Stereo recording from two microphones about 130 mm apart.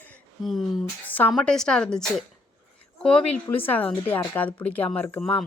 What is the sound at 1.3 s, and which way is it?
A woman's voice, 5° left (ahead or behind).